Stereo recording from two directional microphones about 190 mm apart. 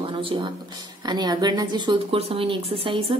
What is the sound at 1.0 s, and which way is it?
A woman's voice, 20° right (ahead or behind).